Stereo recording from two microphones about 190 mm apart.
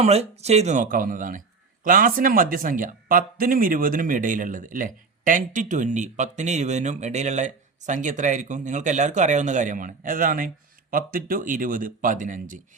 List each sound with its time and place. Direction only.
0.0 s speech: 35° right (ahead or behind)